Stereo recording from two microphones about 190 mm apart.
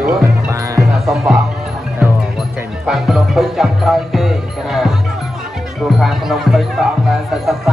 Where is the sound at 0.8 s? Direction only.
Centre (ahead or behind).